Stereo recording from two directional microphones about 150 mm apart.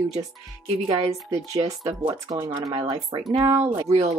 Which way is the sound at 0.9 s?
45° right (ahead or behind).